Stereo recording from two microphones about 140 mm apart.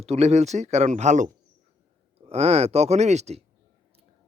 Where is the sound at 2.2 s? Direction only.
45° right (ahead or behind).